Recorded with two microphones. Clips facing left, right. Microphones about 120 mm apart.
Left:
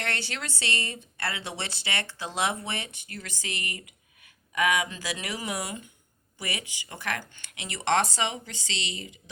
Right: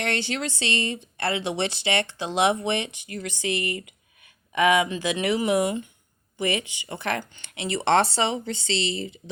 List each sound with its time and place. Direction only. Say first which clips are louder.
0.0 s speech: right 7 dB; 20° right (ahead or behind)